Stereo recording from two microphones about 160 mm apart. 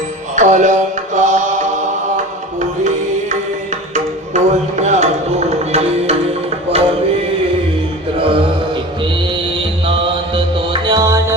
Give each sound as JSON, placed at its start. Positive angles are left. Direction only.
{"t": 0.3, "sound": "mantra", "side_deg": -50}
{"t": 2.1, "sound": "music", "side_deg": -50}
{"t": 8.2, "sound": "a sound", "side_deg": -35}
{"t": 9.8, "sound": "music", "side_deg": -30}